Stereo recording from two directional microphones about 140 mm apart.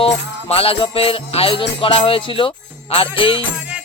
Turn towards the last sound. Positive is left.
turn(degrees=40)  # may be behind; listen again after turning